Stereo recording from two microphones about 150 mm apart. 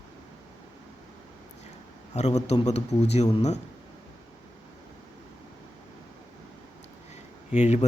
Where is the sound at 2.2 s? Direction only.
45° left (ahead or behind).